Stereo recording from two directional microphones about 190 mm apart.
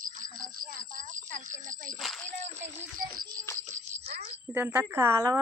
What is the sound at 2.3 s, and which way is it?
Music, 40° right (ahead or behind).